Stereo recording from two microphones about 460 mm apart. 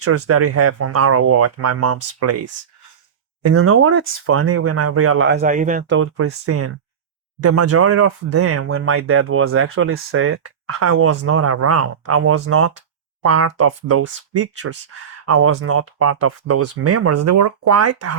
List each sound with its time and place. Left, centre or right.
0.0 s speech: right